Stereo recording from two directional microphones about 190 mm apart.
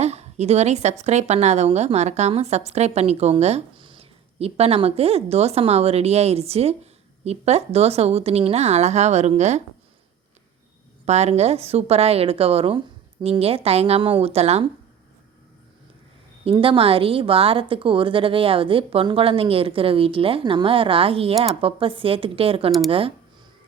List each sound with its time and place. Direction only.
0.0 s a woman's voice: 35° right (ahead or behind)
11.0 s a woman's voice: 35° right (ahead or behind)
16.4 s a woman's voice: 30° right (ahead or behind)